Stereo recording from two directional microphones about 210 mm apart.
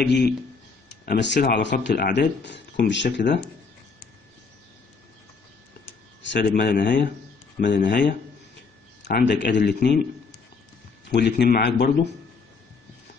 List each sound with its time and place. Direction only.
0.0 s a man's voice: 50° left (ahead or behind)
6.3 s a man's voice: 55° left (ahead or behind)
11.1 s a man's voice: 50° left (ahead or behind)